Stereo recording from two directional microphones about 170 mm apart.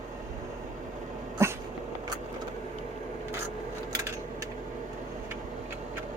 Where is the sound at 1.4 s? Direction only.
15° right (ahead or behind).